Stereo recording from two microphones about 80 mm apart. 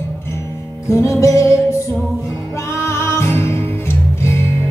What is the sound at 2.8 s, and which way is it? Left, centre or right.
Music, left.